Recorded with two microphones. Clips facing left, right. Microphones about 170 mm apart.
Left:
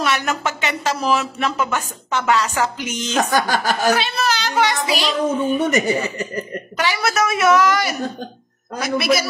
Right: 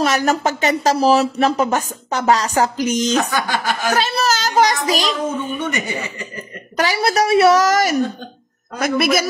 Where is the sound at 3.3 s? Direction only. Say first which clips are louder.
Left 2 dB; 40° left (ahead or behind).